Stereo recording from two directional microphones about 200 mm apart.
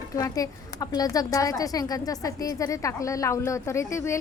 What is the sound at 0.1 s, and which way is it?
A woman's voice, 15° left (ahead or behind).